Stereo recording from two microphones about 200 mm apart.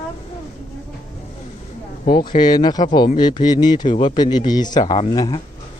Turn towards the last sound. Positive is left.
turn(degrees=20)  # may be behind; listen again after turning